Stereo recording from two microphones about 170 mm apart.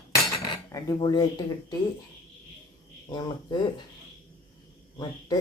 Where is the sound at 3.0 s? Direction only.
25° left (ahead or behind).